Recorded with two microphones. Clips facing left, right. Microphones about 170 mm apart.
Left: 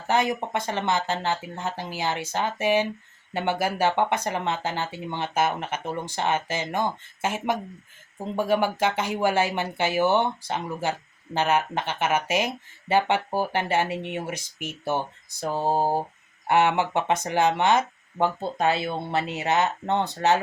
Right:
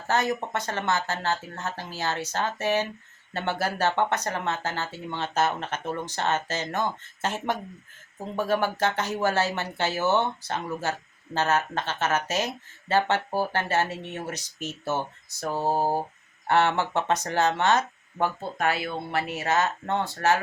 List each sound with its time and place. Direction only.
0.1 s speech: 15° left (ahead or behind)